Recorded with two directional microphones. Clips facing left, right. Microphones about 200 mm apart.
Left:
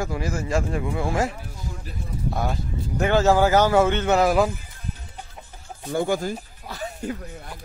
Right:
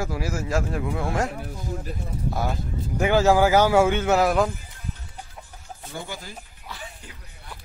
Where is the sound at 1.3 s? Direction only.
45° right (ahead or behind).